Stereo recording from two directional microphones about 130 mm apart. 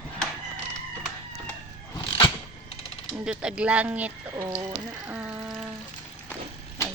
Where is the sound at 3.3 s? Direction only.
10° right (ahead or behind).